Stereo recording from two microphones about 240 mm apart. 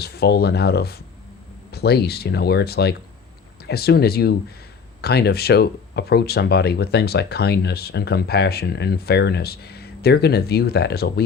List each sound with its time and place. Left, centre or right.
0.0 s speech: left